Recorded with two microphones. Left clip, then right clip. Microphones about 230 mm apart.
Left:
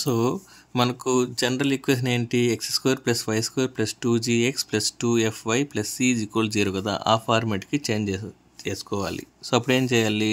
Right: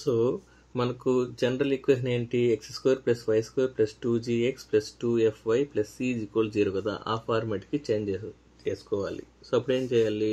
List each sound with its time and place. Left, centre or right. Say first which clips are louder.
0.0 s speech: left 1 dB; left